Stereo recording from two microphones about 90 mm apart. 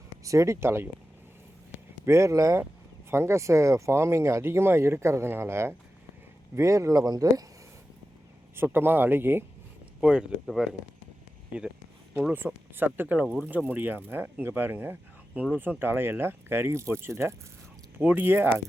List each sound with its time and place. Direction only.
0.3 s speech: 35° right (ahead or behind)
2.0 s speech: 35° right (ahead or behind)
8.5 s speech: 25° right (ahead or behind)
10.0 s speech: 10° right (ahead or behind)
10.4 s speech: centre (ahead or behind)
12.3 s speech: 25° right (ahead or behind)
13.8 s speech: 20° right (ahead or behind)